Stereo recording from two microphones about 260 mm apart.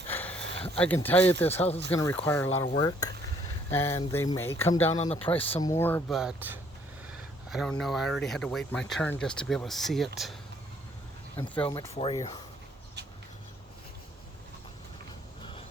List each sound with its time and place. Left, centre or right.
0.1 s a sound: centre
1.0 s speech: centre
4.9 s speech: left
5.4 s speech: centre
11.3 s speech: centre
11.7 s speech: centre